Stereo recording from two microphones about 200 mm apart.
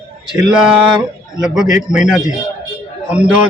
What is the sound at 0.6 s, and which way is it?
Speech, 5° right (ahead or behind).